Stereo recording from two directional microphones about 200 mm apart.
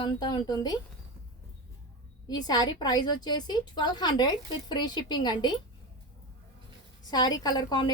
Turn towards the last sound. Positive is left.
turn(degrees=20)  # may be behind; listen again after turning